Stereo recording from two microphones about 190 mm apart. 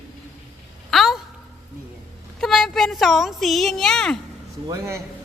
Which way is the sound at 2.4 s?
Centre (ahead or behind).